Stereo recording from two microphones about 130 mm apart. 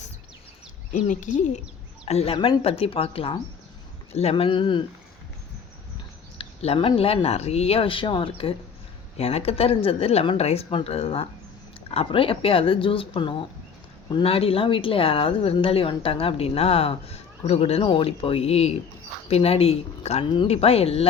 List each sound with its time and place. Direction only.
0.9 s speech: 75° left (ahead or behind)
2.0 s speech: 50° left (ahead or behind)
6.4 s speech: 50° left (ahead or behind)